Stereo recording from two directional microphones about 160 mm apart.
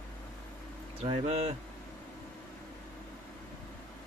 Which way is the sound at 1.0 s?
40° right (ahead or behind).